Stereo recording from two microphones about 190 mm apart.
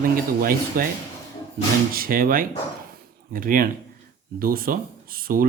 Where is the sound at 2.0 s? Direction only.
50° right (ahead or behind).